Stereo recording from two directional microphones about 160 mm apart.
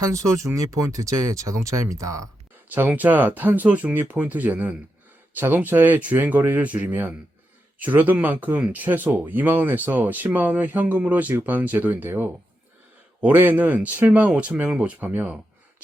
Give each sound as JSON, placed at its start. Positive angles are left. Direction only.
{"t": 0.0, "sound": "speech", "side_deg": -20}